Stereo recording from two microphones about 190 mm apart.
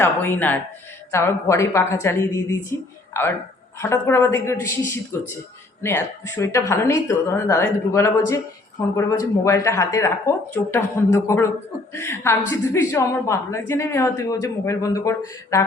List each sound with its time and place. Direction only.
0.0 s a woman's voice: 10° left (ahead or behind)